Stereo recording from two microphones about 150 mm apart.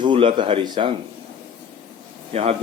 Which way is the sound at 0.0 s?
35° right (ahead or behind).